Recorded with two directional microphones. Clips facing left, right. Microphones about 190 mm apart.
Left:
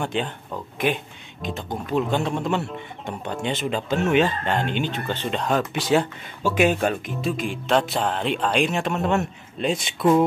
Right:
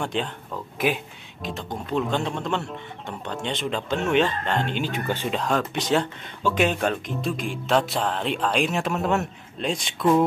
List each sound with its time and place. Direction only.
0.0 s speech: centre (ahead or behind)
4.9 s speech: 10° right (ahead or behind)
5.4 s speech: 5° left (ahead or behind)